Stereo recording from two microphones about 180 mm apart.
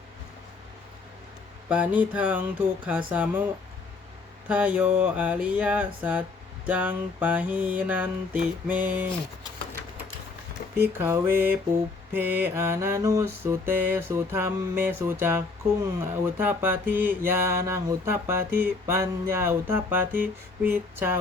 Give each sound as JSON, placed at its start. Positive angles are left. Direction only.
{"t": 1.7, "sound": "music", "side_deg": -10}
{"t": 10.8, "sound": "music", "side_deg": -15}